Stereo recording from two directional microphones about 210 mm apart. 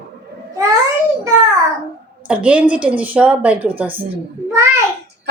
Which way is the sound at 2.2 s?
5° right (ahead or behind).